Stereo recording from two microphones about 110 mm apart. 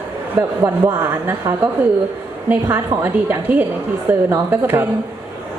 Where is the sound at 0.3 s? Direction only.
20° right (ahead or behind).